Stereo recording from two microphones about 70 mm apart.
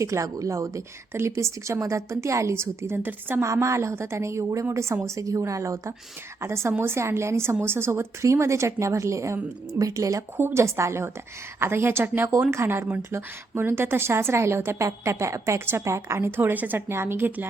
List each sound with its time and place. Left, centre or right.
0.0 s speech: right
3.4 s speech: right
10.3 s speech: right